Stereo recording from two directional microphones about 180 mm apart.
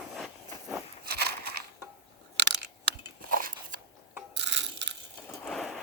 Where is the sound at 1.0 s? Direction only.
60° right (ahead or behind).